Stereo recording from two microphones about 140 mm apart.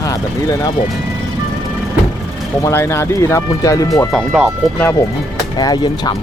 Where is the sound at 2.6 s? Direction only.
20° left (ahead or behind).